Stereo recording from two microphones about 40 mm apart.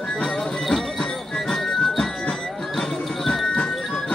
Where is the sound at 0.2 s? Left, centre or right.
Centre.